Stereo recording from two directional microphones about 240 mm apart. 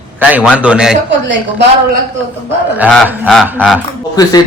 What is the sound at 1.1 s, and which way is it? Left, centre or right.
Speech, right.